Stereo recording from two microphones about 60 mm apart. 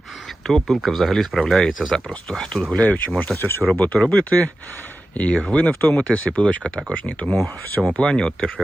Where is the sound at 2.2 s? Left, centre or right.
Centre.